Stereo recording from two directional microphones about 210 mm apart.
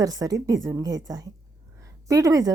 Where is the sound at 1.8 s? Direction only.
15° right (ahead or behind).